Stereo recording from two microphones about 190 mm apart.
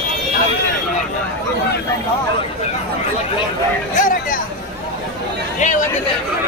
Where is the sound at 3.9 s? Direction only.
45° left (ahead or behind).